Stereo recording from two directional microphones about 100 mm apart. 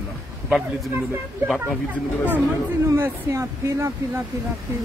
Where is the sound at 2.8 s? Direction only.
25° right (ahead or behind).